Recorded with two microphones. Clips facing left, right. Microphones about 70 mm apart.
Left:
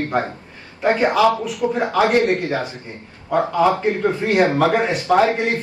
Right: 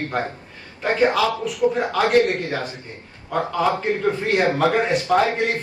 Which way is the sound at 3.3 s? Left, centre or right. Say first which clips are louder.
Left 4 dB; centre.